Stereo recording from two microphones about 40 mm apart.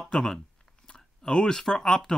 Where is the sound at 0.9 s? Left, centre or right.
Centre.